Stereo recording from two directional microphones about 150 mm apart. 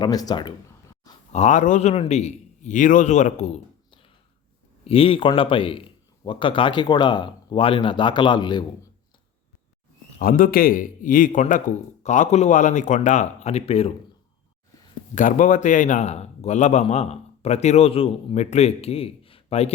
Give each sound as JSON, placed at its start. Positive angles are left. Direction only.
{"t": 0.0, "sound": "speech", "side_deg": 25}
{"t": 1.3, "sound": "a man's voice", "side_deg": 50}
{"t": 4.9, "sound": "a man's voice", "side_deg": 40}
{"t": 10.2, "sound": "a man's voice", "side_deg": 65}
{"t": 15.1, "sound": "a man's voice", "side_deg": 60}